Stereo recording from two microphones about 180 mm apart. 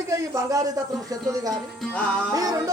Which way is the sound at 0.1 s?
20° right (ahead or behind).